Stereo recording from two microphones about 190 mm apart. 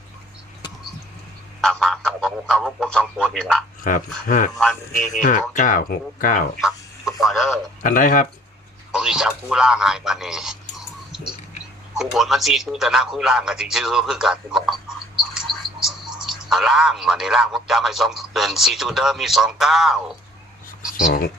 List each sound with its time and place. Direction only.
1.6 s speech: centre (ahead or behind)
3.8 s speech: 45° left (ahead or behind)
4.5 s speech: centre (ahead or behind)
5.2 s speech: 45° left (ahead or behind)
6.6 s chicken: centre (ahead or behind)
7.2 s speech: centre (ahead or behind)
7.8 s speech: 45° left (ahead or behind)
8.9 s speech: 5° right (ahead or behind)